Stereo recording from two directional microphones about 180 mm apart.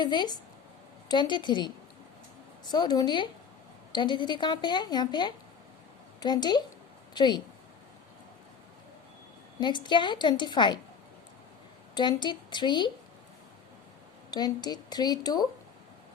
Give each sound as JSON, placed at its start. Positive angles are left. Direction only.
{"t": 0.0, "sound": "a woman's voice", "side_deg": 25}
{"t": 9.6, "sound": "a woman's voice", "side_deg": 25}
{"t": 11.9, "sound": "a woman's voice", "side_deg": 25}
{"t": 14.3, "sound": "a woman's voice", "side_deg": 20}